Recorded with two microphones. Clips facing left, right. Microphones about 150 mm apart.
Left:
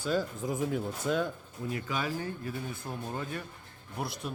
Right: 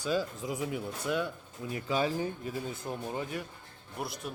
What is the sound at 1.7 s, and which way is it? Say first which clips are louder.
Speech: right 5 dB; 30° right (ahead or behind).